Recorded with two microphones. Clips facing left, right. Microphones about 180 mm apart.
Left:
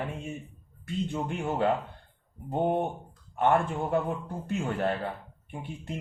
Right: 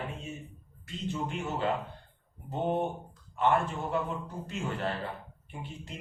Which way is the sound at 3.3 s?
55° left (ahead or behind).